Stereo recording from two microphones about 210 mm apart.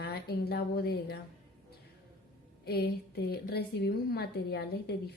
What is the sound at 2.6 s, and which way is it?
A woman's voice, 50° left (ahead or behind).